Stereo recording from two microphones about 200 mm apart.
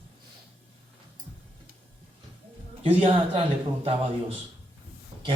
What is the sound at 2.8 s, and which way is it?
Speech, 30° right (ahead or behind).